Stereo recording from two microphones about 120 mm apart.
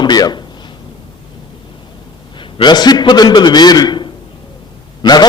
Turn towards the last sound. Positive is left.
turn(degrees=35)  # may be behind; listen again after turning